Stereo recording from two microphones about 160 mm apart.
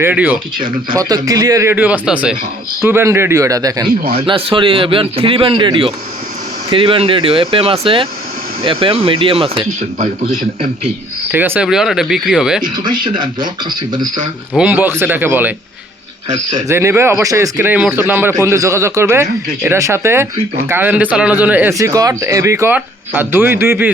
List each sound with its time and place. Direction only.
0.0 s speech: 10° right (ahead or behind)
0.9 s speech: 25° right (ahead or behind)
4.3 s a man's voice: 35° right (ahead or behind)
11.3 s speech: 10° right (ahead or behind)
12.7 s speech: 30° right (ahead or behind)
14.5 s speech: 10° right (ahead or behind)
16.6 s speech: 15° right (ahead or behind)